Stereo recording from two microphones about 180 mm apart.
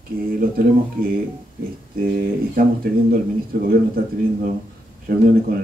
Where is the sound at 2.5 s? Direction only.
55° right (ahead or behind).